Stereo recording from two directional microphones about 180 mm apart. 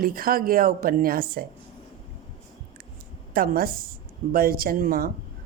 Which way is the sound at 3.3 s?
55° right (ahead or behind).